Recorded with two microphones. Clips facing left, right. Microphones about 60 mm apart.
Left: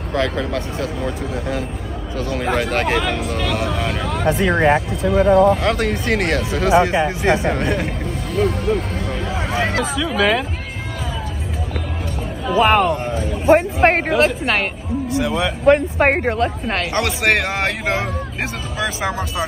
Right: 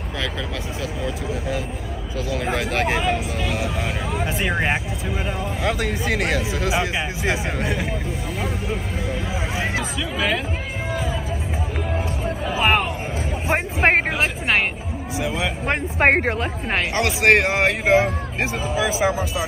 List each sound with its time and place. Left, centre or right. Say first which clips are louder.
2.1 s speech: left 4 dB; centre
3.1 s speech: left 2 dB; centre
4.4 s speech: left 7 dB; left
5.6 s speech: left 4 dB; centre
6.8 s speech: left 8 dB; left
7.3 s speech: left 5 dB; centre
10.1 s speech: left 6 dB; left
12.4 s speech: left 6 dB; centre
13.5 s speech: left 7 dB; centre
13.9 s speech: left 4 dB; centre
16.9 s speech: right 2 dB; centre